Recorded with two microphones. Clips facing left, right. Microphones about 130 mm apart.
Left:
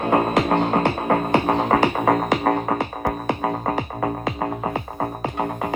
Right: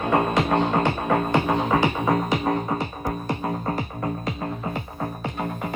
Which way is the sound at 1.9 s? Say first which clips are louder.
Left 3 dB; 55° left (ahead or behind).